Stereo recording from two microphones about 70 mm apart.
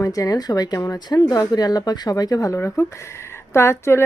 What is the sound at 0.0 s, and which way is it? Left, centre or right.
Speech, left.